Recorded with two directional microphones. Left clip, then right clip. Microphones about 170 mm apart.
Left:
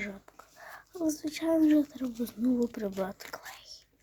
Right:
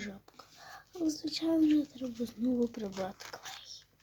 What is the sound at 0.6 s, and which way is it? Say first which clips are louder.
Speech: left 2 dB; 15° left (ahead or behind).